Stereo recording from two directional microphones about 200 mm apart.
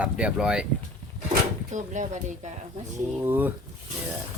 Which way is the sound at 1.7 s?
40° right (ahead or behind).